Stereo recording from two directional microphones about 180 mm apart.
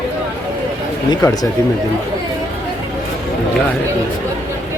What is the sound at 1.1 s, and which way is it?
Speech, 20° left (ahead or behind).